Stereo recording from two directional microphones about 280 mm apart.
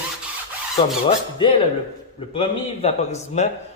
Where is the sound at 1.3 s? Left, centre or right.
Centre.